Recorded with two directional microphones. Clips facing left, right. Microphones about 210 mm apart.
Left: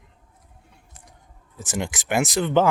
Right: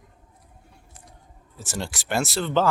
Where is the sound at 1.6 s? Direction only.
15° left (ahead or behind).